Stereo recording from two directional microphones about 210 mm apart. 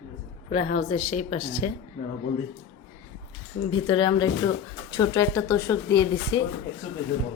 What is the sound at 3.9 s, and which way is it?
Speech, 20° left (ahead or behind).